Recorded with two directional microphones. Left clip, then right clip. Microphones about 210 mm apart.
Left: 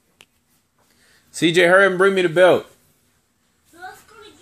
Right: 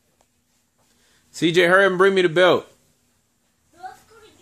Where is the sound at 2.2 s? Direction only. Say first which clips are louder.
Left 4 dB; 15° right (ahead or behind).